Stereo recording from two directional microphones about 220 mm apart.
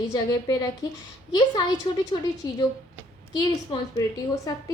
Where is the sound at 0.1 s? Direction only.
15° left (ahead or behind).